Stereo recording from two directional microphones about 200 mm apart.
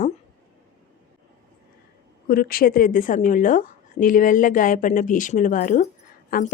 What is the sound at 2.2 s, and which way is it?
A woman's voice, 45° left (ahead or behind).